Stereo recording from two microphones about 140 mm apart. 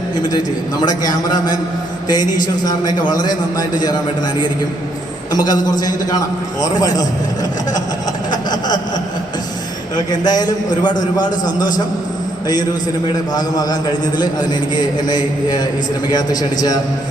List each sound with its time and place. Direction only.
0.8 s a man's voice: 30° left (ahead or behind)
5.3 s a man's voice: 30° left (ahead or behind)
8.3 s a sound: 30° left (ahead or behind)
9.9 s a man's voice: 30° left (ahead or behind)
13.3 s a man's voice: 25° left (ahead or behind)